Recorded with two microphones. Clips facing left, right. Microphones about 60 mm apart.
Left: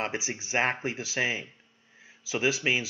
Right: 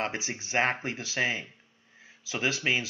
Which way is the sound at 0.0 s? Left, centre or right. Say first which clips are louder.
Even; centre.